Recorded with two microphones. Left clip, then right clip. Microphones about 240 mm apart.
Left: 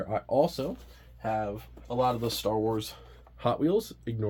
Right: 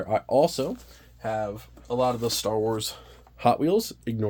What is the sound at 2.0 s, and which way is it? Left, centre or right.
Speech, right.